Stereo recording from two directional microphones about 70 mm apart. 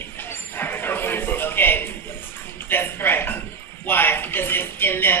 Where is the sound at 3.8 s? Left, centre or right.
Left.